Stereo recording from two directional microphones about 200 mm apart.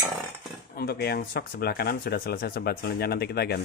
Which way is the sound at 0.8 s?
50° left (ahead or behind).